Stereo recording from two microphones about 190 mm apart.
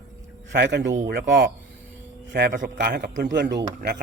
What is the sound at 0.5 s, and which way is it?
Speech, 65° right (ahead or behind).